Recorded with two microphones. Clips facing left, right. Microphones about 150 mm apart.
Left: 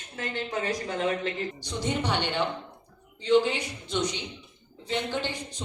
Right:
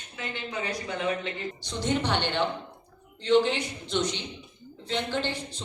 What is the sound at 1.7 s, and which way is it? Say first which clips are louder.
A woman's voice: right 2 dB; 10° left (ahead or behind).